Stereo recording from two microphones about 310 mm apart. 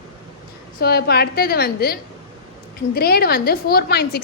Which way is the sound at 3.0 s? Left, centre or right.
Left.